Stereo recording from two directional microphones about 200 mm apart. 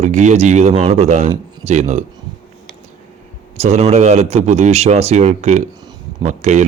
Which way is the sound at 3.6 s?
35° right (ahead or behind).